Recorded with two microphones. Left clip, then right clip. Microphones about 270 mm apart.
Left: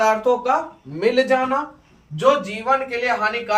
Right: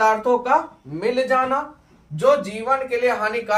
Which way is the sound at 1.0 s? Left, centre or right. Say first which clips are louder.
Left 2 dB; right.